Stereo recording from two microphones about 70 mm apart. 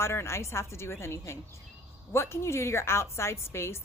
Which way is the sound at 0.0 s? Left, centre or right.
Left.